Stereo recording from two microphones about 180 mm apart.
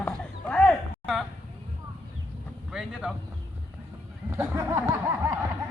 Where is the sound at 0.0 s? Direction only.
5° left (ahead or behind).